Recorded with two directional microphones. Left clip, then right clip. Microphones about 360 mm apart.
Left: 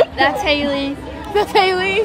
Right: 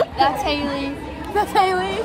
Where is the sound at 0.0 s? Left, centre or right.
Left.